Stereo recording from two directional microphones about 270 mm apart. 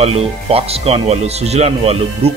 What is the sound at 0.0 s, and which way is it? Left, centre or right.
Speech, right.